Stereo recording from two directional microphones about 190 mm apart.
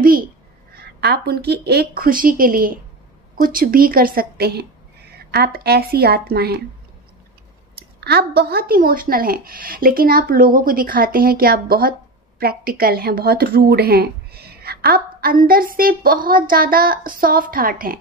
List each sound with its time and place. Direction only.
0.0 s a sound: 45° right (ahead or behind)
0.7 s a woman's voice: 60° right (ahead or behind)
8.0 s speech: 60° right (ahead or behind)